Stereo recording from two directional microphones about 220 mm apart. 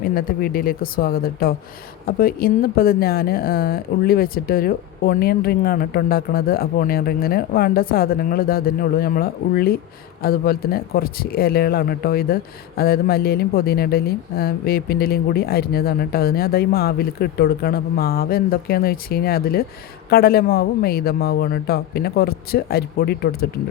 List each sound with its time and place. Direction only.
0.0 s speech: 40° left (ahead or behind)